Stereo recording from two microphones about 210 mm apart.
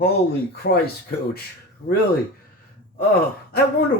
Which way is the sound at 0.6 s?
60° left (ahead or behind).